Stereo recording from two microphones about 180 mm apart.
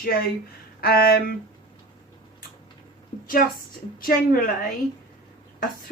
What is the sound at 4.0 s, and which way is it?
Speech, 50° left (ahead or behind).